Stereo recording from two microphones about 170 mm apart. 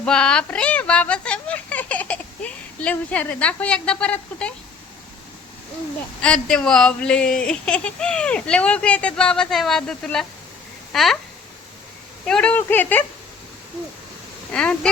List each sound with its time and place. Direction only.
0.0 s speech: 5° left (ahead or behind)
6.2 s speech: 5° left (ahead or behind)
12.2 s speech: 5° left (ahead or behind)
14.5 s speech: 5° left (ahead or behind)